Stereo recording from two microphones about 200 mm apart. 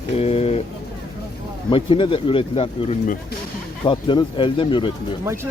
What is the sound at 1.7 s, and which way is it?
Speech, 25° left (ahead or behind).